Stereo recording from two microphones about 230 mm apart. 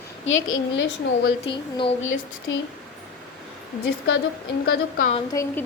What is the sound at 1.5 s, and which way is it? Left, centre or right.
Speech, left.